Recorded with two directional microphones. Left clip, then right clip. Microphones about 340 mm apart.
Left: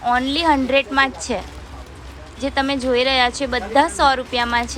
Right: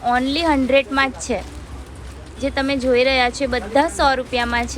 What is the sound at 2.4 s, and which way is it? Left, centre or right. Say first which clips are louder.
A woman's voice: even; centre.